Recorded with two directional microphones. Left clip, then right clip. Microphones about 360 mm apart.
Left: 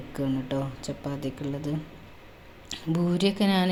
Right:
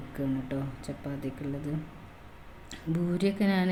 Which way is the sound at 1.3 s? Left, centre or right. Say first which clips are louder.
Left 4 dB; left.